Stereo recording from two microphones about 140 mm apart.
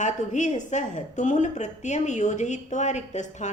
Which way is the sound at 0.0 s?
60° left (ahead or behind).